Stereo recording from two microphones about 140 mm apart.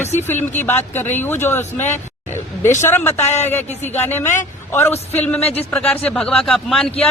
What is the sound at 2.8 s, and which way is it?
A man's voice, 15° left (ahead or behind).